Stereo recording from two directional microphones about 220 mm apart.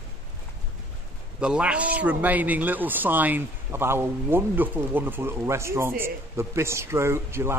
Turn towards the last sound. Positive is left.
turn(degrees=-10)  # may be behind; listen again after turning